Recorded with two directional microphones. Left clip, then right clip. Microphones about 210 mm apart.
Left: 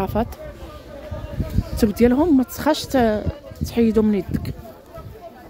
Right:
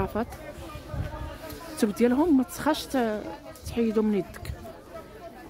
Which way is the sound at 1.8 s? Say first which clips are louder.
Left 6 dB; 10° left (ahead or behind).